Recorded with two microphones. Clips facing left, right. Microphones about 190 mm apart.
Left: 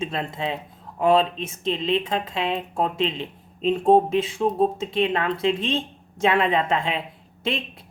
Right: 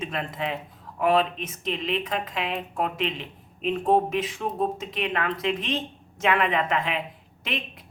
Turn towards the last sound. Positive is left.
turn(degrees=30)  # may be behind; listen again after turning